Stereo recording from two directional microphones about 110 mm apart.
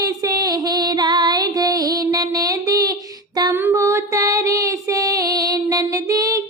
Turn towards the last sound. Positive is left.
turn(degrees=-30)  # may be behind; listen again after turning